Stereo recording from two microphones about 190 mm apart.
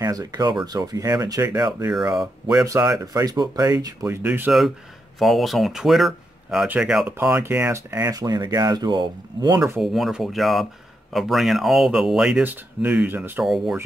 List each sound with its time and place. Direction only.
0.0 s speech: 20° right (ahead or behind)
1.5 s speech: 5° right (ahead or behind); by 9.6 s 20° right (ahead or behind)
9.6 s speech: centre (ahead or behind)